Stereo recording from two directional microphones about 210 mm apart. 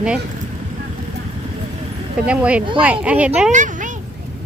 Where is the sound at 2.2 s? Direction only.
5° right (ahead or behind).